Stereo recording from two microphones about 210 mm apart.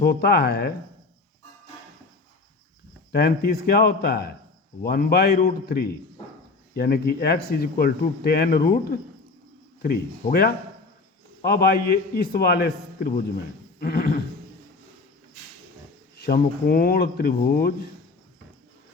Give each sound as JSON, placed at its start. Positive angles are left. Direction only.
{"t": 0.0, "sound": "speech", "side_deg": 45}
{"t": 3.1, "sound": "speech", "side_deg": 45}
{"t": 13.7, "sound": "a sound", "side_deg": 45}
{"t": 16.1, "sound": "speech", "side_deg": 50}